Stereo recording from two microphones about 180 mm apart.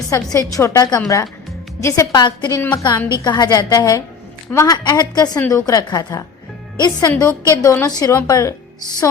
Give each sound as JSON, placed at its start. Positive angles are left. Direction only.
{"t": 0.3, "sound": "a woman's voice", "side_deg": 15}